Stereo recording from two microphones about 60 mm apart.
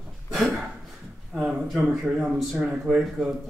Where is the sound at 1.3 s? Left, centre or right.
Centre.